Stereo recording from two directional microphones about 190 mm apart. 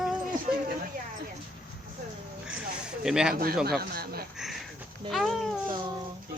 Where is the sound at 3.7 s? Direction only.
55° right (ahead or behind).